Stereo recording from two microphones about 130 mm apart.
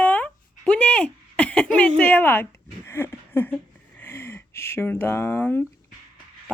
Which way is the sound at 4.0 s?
20° left (ahead or behind).